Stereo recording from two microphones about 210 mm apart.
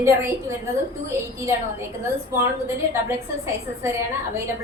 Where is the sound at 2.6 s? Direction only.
10° right (ahead or behind).